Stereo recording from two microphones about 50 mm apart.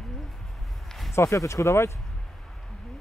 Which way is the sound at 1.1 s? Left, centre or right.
Left.